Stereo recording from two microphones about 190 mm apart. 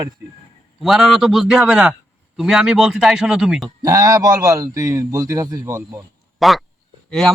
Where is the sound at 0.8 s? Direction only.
Centre (ahead or behind).